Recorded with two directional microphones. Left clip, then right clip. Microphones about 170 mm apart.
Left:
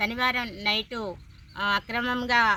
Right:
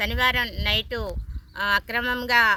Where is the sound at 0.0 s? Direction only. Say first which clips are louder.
Right 3 dB; 25° right (ahead or behind).